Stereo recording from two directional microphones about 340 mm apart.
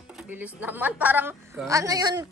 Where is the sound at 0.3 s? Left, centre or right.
Centre.